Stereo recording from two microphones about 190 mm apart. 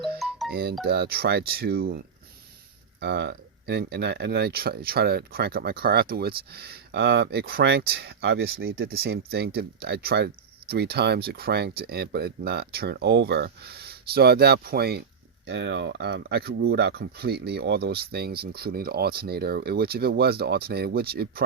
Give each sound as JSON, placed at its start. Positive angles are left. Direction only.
{"t": 0.2, "sound": "music", "side_deg": 0}
{"t": 0.5, "sound": "speech", "side_deg": -55}
{"t": 3.0, "sound": "speech", "side_deg": -60}
{"t": 15.4, "sound": "speech", "side_deg": -65}